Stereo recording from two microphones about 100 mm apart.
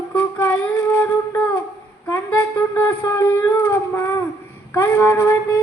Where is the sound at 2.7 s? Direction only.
25° left (ahead or behind).